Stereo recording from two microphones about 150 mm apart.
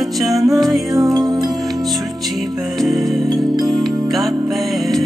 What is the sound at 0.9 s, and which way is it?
Music, 25° right (ahead or behind).